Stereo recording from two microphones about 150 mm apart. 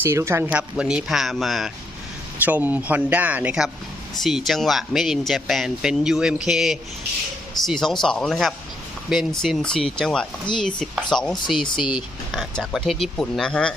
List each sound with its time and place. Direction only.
0.0 s speech: 20° right (ahead or behind)
0.5 s speech: 5° right (ahead or behind)
2.4 s speech: 10° right (ahead or behind); by 13.7 s 5° left (ahead or behind)